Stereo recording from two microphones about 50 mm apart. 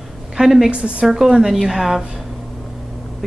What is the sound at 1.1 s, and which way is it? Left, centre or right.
A woman's voice, centre.